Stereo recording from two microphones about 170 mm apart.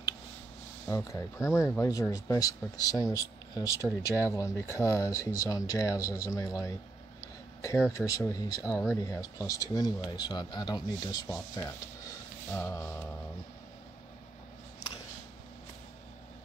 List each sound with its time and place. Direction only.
0.8 s speech: 20° left (ahead or behind)
8.0 s speech: 20° left (ahead or behind)